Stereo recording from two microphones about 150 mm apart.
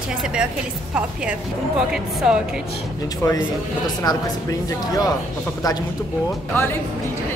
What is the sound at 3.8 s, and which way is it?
Speech, 25° left (ahead or behind).